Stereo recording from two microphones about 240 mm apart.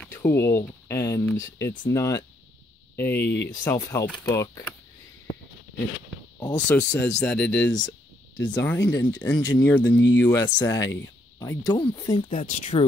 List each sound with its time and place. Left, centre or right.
0.1 s speech: centre
3.2 s speech: left
3.6 s speech: centre
6.4 s speech: centre
9.9 s speech: left
10.2 s speech: centre
12.3 s speech: left